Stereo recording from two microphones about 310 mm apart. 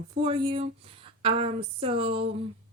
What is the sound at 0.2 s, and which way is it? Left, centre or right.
Speech, centre.